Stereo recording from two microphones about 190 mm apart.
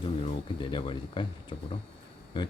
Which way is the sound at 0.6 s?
25° left (ahead or behind).